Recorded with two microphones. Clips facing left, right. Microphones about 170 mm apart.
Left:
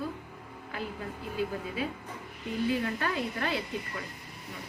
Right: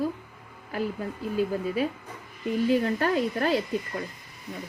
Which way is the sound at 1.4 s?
40° right (ahead or behind).